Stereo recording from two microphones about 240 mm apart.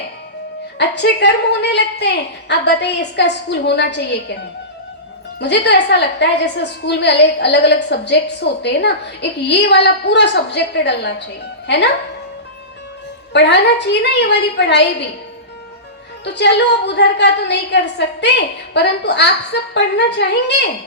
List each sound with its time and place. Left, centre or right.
0.8 s a woman's voice: left
5.4 s a woman's voice: left
13.3 s a woman's voice: left
16.2 s a woman's voice: left